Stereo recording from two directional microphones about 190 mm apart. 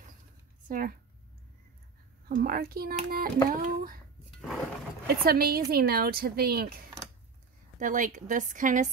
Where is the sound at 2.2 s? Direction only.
50° right (ahead or behind).